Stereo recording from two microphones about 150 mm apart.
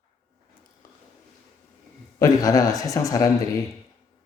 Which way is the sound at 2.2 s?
25° left (ahead or behind).